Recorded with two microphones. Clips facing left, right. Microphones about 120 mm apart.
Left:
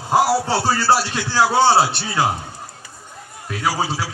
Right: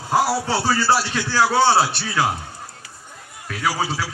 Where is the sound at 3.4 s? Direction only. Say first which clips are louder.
Left 1 dB; 25° left (ahead or behind).